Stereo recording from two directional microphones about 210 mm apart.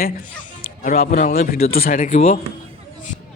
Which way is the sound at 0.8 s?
40° left (ahead or behind).